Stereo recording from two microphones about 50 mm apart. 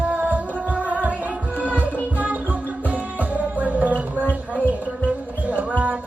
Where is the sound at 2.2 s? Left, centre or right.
Right.